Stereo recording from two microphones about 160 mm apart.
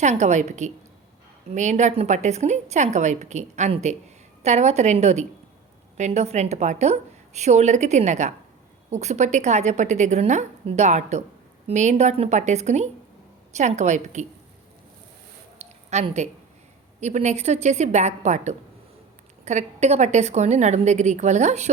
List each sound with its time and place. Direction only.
0.0 s a woman's voice: 45° right (ahead or behind)
15.9 s a woman's voice: 45° right (ahead or behind)